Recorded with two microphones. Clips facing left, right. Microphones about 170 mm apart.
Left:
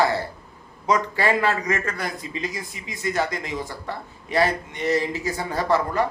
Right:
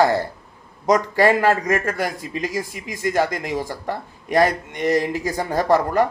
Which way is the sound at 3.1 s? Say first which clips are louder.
Right 4 dB; 45° right (ahead or behind).